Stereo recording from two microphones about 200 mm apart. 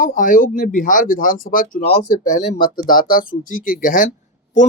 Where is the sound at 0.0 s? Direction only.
40° left (ahead or behind).